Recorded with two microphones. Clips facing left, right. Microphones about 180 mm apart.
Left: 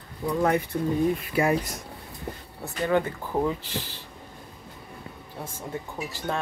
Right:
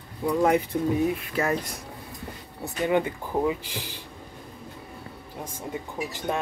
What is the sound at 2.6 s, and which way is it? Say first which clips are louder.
Speech: even; 15° right (ahead or behind).